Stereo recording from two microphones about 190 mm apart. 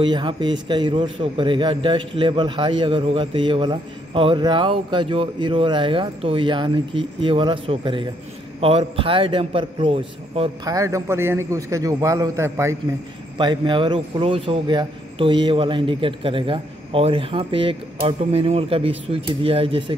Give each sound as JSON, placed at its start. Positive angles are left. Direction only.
{"t": 0.0, "sound": "a man's voice", "side_deg": -25}